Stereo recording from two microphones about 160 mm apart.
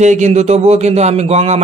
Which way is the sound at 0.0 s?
45° right (ahead or behind).